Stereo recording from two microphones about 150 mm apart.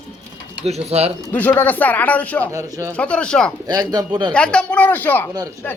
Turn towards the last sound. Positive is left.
turn(degrees=10)  # may be behind; listen again after turning